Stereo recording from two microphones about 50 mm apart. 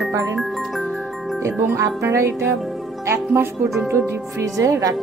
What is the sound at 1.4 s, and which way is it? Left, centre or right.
Speech, right.